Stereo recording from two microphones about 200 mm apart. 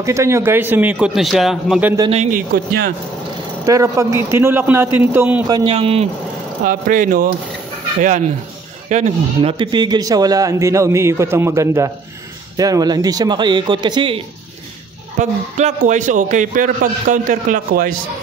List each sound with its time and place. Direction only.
0.0 s a man's voice: 15° right (ahead or behind)
2.0 s speech: 30° right (ahead or behind)
2.3 s speech: 50° right (ahead or behind)
3.6 s a man's voice: 15° right (ahead or behind)
6.6 s speech: 45° right (ahead or behind)
8.8 s a man's voice: 35° right (ahead or behind)
15.1 s a man's voice: 40° right (ahead or behind)